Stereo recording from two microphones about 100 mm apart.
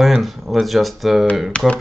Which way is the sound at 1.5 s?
10° left (ahead or behind).